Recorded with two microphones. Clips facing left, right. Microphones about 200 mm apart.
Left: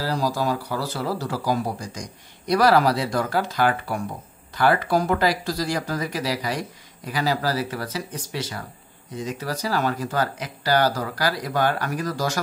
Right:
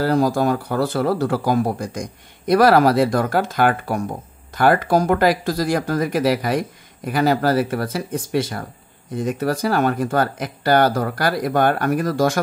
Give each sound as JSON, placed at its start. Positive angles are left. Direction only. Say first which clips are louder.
{"t": 0.0, "sound": "speech", "louder": "right 7 dB", "side_deg": -55}